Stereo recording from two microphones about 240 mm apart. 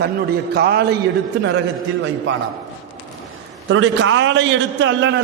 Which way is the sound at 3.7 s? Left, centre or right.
Right.